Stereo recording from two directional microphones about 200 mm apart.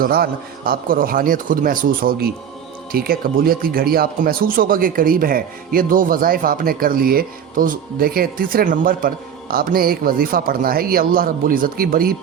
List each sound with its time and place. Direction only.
0.0 s speech: 50° right (ahead or behind)